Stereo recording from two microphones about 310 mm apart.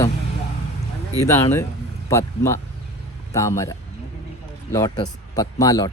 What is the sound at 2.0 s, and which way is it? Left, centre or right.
A man's voice, centre.